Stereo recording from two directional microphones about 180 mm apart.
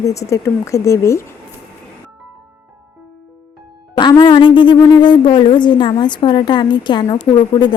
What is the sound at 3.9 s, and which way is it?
Speech, 25° left (ahead or behind).